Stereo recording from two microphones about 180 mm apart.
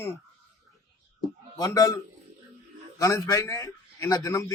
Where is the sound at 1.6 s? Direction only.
20° left (ahead or behind).